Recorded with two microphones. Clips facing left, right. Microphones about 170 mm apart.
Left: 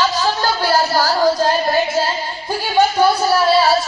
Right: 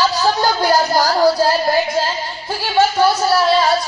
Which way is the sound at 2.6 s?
15° left (ahead or behind).